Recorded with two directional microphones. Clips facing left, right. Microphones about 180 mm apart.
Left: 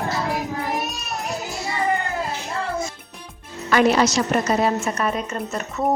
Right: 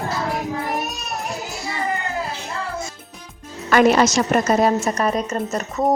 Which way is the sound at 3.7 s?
50° right (ahead or behind).